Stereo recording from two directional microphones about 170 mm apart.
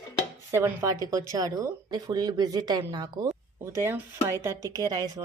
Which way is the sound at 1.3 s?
20° right (ahead or behind).